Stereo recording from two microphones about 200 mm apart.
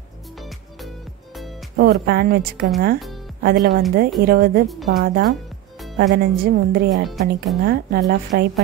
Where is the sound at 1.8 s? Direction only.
55° right (ahead or behind).